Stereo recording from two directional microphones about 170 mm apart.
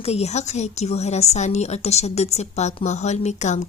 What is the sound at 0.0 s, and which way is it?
A woman's voice, 40° left (ahead or behind).